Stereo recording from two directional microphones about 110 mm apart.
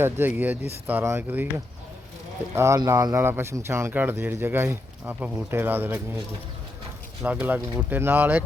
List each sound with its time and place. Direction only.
0.0 s speech: 15° right (ahead or behind)
2.6 s speech: 30° right (ahead or behind)
7.2 s speech: 15° right (ahead or behind)